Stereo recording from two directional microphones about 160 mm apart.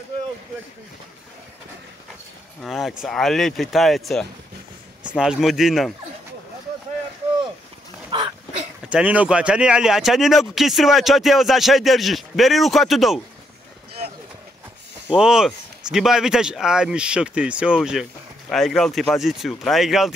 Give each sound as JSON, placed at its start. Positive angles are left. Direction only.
{"t": 2.6, "sound": "speech", "side_deg": 0}
{"t": 8.1, "sound": "a sound", "side_deg": -30}
{"t": 8.8, "sound": "speech", "side_deg": -10}
{"t": 15.0, "sound": "speech", "side_deg": -5}